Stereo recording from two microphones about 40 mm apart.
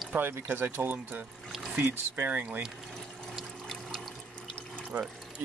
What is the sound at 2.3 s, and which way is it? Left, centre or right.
Speech, right.